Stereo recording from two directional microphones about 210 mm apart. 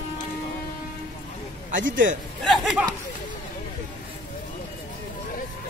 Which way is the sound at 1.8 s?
60° right (ahead or behind).